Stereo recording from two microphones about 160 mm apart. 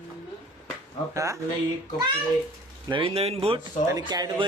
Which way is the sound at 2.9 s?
35° right (ahead or behind).